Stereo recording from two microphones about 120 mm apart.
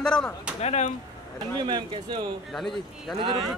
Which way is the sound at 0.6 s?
65° left (ahead or behind).